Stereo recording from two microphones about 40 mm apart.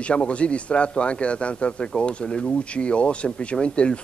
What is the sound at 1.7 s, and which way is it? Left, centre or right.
A man's voice, centre.